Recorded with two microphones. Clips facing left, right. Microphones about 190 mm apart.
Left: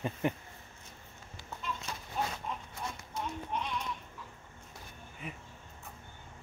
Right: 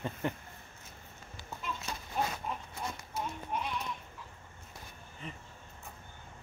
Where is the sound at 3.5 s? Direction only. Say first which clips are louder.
Right 1 dB; 5° right (ahead or behind).